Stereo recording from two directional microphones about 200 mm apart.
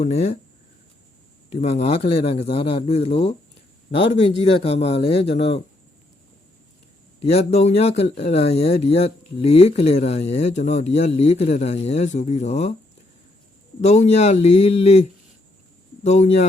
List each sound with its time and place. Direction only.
1.5 s a man's voice: 30° left (ahead or behind)
7.2 s speech: 30° left (ahead or behind)
13.8 s speech: 35° left (ahead or behind)
16.0 s speech: 35° left (ahead or behind)